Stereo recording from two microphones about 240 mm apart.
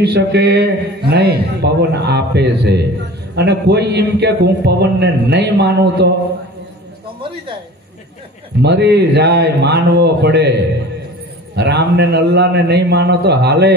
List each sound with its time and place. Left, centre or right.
0.0 s a man's voice: right
8.6 s a man's voice: right
11.5 s a man's voice: right